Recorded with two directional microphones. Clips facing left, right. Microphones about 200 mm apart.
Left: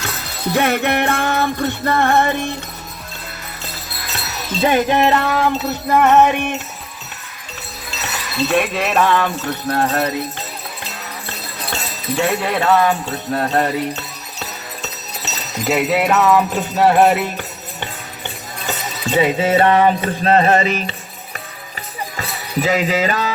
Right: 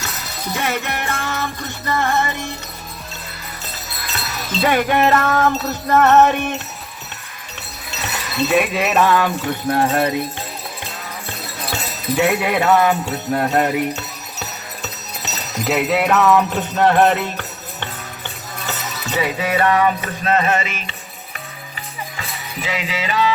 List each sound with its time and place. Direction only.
0.5 s music: 60° left (ahead or behind)
4.6 s wind chime: 20° left (ahead or behind)
8.4 s jingle bell: centre (ahead or behind)
11.7 s jingle bell: 10° right (ahead or behind); by 17.8 s 10° left (ahead or behind)
18.6 s music: 20° left (ahead or behind); by 20.9 s 35° left (ahead or behind)
22.2 s speech: 40° left (ahead or behind)